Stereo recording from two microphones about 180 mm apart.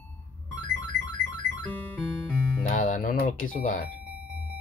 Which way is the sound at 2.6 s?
50° left (ahead or behind).